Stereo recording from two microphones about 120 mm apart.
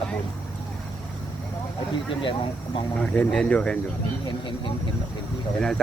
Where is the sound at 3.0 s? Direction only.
10° left (ahead or behind).